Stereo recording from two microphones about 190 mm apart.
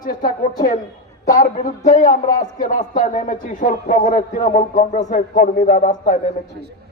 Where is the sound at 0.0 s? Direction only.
45° left (ahead or behind).